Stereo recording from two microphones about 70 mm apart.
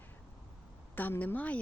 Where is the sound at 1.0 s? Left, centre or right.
Left.